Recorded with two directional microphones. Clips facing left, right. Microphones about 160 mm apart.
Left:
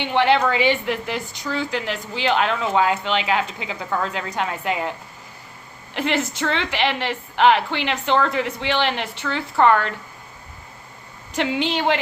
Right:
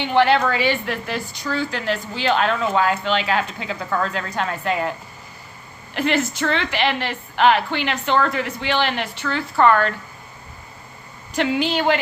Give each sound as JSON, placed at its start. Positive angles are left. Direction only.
{"t": 0.2, "sound": "a woman's voice", "side_deg": 20}
{"t": 5.9, "sound": "a woman's voice", "side_deg": 25}
{"t": 11.3, "sound": "a woman's voice", "side_deg": 25}